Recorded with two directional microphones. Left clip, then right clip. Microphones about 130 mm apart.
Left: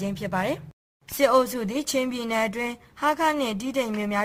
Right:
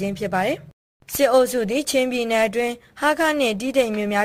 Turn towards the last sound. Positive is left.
turn(degrees=-30)  # may be behind; listen again after turning